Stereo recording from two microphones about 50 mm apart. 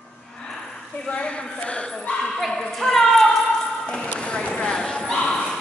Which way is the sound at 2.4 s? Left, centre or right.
Centre.